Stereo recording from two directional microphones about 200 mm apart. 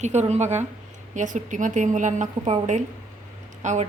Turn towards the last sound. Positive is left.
turn(degrees=-35)  # may be behind; listen again after turning